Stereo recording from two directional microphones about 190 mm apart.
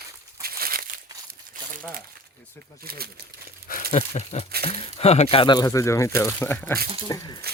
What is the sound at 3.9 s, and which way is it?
Speech, 35° left (ahead or behind).